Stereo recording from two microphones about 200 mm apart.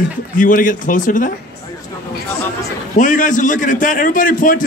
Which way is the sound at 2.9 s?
40° left (ahead or behind).